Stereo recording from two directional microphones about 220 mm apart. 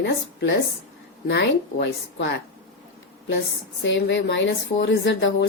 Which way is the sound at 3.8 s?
55° left (ahead or behind).